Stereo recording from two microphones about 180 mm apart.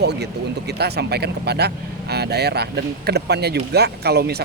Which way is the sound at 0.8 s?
65° right (ahead or behind).